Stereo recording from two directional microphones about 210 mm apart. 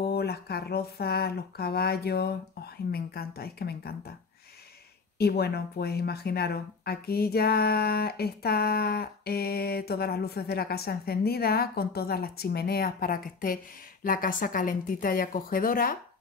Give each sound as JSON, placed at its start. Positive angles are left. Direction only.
{"t": 0.0, "sound": "speech", "side_deg": 50}
{"t": 5.2, "sound": "a woman's voice", "side_deg": 50}